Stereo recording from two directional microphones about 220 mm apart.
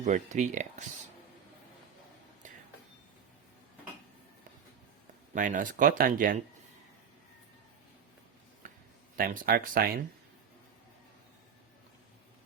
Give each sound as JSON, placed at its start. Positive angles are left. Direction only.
{"t": 0.0, "sound": "speech", "side_deg": -35}
{"t": 5.3, "sound": "speech", "side_deg": -35}
{"t": 8.6, "sound": "a sound", "side_deg": -40}
{"t": 9.1, "sound": "speech", "side_deg": -40}